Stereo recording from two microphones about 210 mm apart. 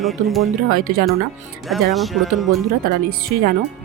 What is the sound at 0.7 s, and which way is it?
Speech, 40° right (ahead or behind).